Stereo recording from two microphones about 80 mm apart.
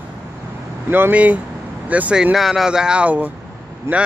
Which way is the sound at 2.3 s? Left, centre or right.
Centre.